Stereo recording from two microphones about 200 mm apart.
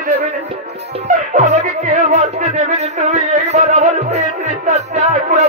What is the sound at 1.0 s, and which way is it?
Music, 35° right (ahead or behind).